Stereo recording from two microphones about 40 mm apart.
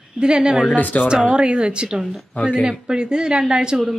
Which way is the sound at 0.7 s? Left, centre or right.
Left.